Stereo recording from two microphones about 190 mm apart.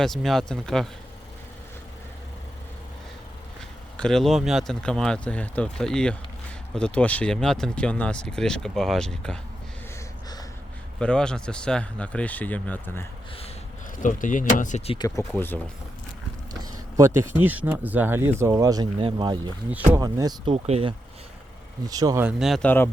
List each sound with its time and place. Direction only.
0.0 s speech: centre (ahead or behind)
3.9 s speech: 5° left (ahead or behind)
11.0 s speech: 5° left (ahead or behind)
14.0 s speech: 45° left (ahead or behind)
14.9 s speech: 15° left (ahead or behind)
17.2 s speech: 10° right (ahead or behind); by 20.9 s 30° right (ahead or behind)
21.8 s speech: 20° right (ahead or behind)
22.2 s speech: 5° right (ahead or behind)